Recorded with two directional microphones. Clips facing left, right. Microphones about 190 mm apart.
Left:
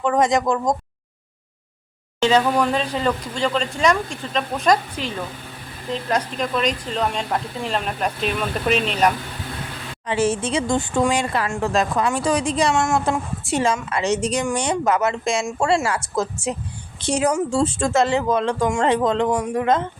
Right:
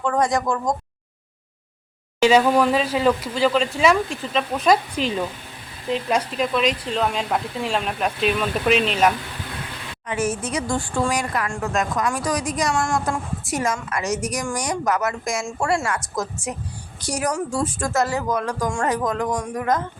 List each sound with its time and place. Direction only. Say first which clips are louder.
0.0 s speech: left 3 dB; 20° left (ahead or behind)
2.2 s speech: right 2 dB; 10° right (ahead or behind)
4.9 s speech: right 4 dB; 20° right (ahead or behind)
6.1 s speech: even; 5° right (ahead or behind)
10.1 s speech: left 4 dB; 30° left (ahead or behind)